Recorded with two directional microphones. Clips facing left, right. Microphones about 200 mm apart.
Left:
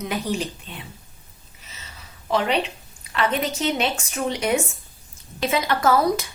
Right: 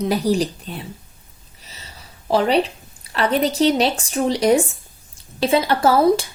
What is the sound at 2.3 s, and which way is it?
A woman's voice, 35° right (ahead or behind).